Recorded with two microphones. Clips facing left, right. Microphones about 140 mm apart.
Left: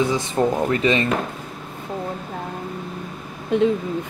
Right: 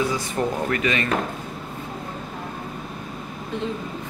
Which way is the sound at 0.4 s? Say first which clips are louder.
Left 5 dB; 25° left (ahead or behind).